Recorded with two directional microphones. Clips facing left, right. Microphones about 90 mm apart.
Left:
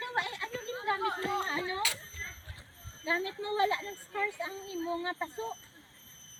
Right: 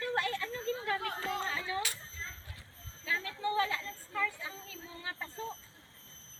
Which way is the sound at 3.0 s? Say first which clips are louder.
Left 2 dB; 20° left (ahead or behind).